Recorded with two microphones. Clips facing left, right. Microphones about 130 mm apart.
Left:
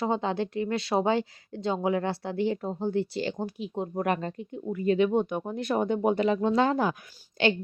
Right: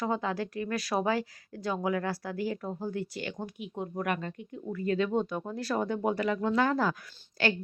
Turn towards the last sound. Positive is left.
turn(degrees=20)  # may be behind; listen again after turning